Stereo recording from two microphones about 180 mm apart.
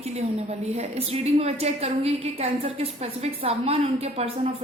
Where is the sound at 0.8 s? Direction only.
35° right (ahead or behind).